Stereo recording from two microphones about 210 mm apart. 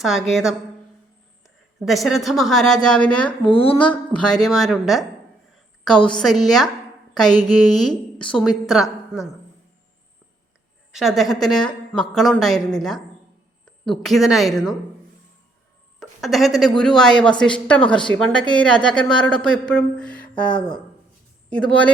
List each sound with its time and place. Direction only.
0.0 s speech: centre (ahead or behind)
3.5 s a woman's voice: 25° left (ahead or behind)
3.8 s speech: 5° left (ahead or behind)
7.1 s a sound: 5° left (ahead or behind)
7.4 s speech: 5° left (ahead or behind)
10.9 s speech: centre (ahead or behind)
16.0 s speech: centre (ahead or behind)
21.5 s speech: 5° left (ahead or behind)